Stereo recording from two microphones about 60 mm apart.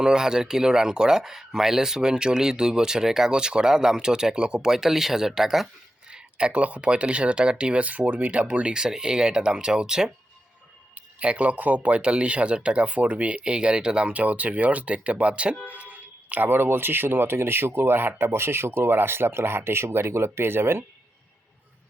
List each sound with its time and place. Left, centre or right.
0.0 s speech: centre; by 20.8 s right